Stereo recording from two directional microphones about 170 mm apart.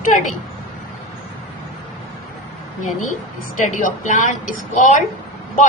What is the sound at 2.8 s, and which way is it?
A woman's voice, 45° left (ahead or behind).